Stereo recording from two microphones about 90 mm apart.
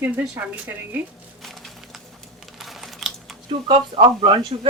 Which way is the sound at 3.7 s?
80° right.